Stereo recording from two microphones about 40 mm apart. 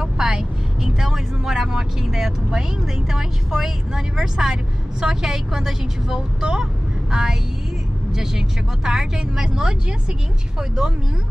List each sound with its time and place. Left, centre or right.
0.2 s vehicle: centre
0.9 s speech: centre